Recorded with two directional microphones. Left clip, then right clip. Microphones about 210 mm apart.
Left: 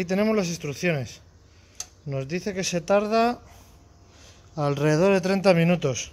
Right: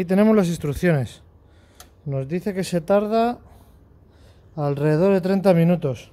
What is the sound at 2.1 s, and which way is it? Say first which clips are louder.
Speech: right 3 dB; 15° right (ahead or behind).